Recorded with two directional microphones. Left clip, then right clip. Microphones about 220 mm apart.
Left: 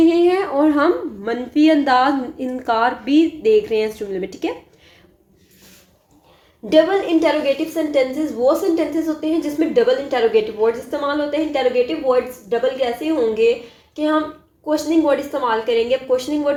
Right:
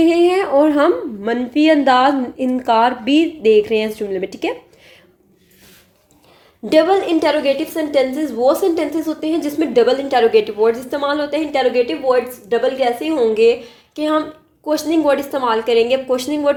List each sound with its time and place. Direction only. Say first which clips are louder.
0.0 s a woman's voice: right 1 dB; 35° right (ahead or behind)
6.7 s a woman's voice: right 2 dB; 45° right (ahead or behind)